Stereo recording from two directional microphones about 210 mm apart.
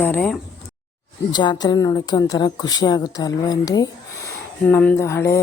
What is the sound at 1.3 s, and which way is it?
A woman's voice, 20° left (ahead or behind).